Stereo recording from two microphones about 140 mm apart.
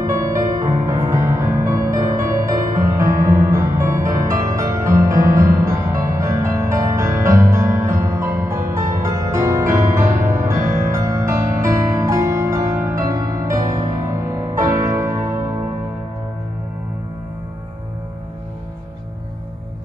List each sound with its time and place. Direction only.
0.0 s music: 20° right (ahead or behind)